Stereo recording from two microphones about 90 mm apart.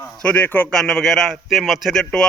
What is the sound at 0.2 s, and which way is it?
Speech, 15° left (ahead or behind).